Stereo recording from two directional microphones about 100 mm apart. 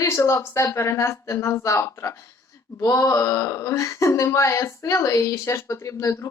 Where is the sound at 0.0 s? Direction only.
30° left (ahead or behind).